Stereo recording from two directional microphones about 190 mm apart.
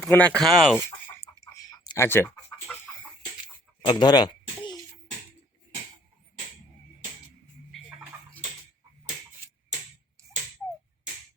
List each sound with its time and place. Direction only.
0.1 s speech: 10° left (ahead or behind)
1.4 s chicken: 20° left (ahead or behind)
3.8 s a sound: 20° left (ahead or behind)